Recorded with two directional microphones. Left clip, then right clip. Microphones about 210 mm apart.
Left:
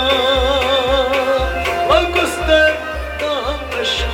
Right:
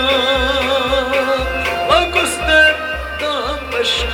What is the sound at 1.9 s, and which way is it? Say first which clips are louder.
Music: right 1 dB; 45° right (ahead or behind).